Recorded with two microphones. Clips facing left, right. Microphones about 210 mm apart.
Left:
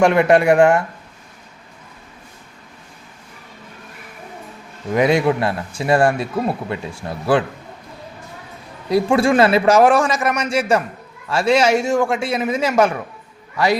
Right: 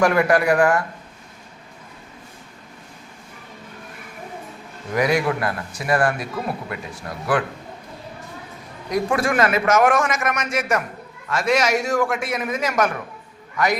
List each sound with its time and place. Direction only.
0.0 s a man's voice: 25° left (ahead or behind)
4.9 s a man's voice: 25° left (ahead or behind)
8.9 s a man's voice: 30° left (ahead or behind)